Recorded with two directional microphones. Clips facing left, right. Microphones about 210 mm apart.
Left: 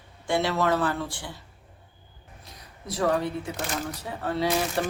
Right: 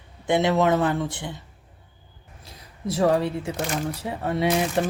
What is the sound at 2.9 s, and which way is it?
Speech, 25° right (ahead or behind).